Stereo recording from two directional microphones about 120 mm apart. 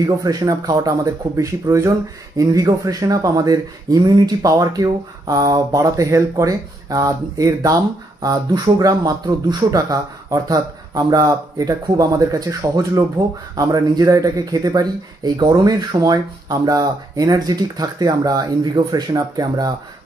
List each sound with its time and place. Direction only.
0.0 s speech: 30° right (ahead or behind)